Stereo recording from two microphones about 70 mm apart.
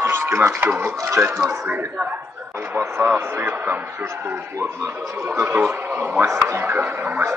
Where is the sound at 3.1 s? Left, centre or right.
Right.